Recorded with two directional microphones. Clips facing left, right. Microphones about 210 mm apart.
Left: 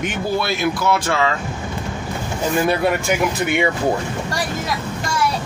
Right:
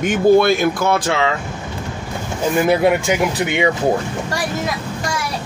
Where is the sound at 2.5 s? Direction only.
15° right (ahead or behind).